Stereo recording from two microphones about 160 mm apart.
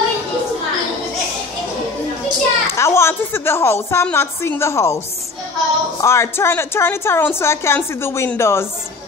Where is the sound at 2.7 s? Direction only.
15° left (ahead or behind).